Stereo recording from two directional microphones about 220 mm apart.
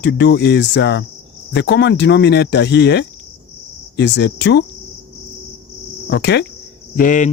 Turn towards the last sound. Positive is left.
turn(degrees=35)  # may be behind; listen again after turning